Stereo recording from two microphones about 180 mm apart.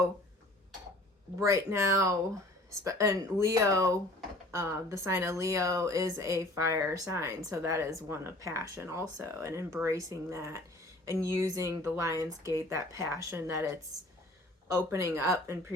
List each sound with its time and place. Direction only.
1.4 s speech: 15° right (ahead or behind)
14.8 s speech: 15° right (ahead or behind)